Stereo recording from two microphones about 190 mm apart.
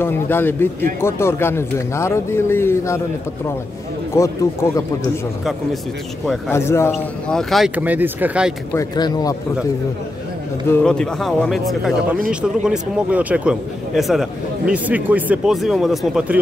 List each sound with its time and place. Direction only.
0.0 s speech: 10° left (ahead or behind)
4.1 s speech: 15° left (ahead or behind)
5.4 s speech: centre (ahead or behind)
6.5 s speech: 15° left (ahead or behind)
6.9 s speech: centre (ahead or behind)
8.7 s a man's voice: 20° left (ahead or behind)
10.7 s speech: 5° left (ahead or behind)